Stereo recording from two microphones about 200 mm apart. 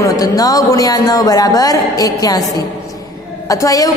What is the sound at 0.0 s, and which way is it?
A woman's voice, 20° left (ahead or behind).